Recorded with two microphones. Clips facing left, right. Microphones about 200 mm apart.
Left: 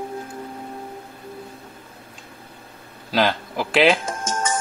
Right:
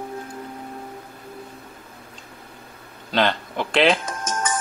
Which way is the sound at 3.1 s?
5° left (ahead or behind).